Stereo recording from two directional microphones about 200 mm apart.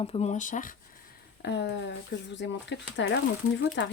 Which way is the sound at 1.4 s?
60° left (ahead or behind).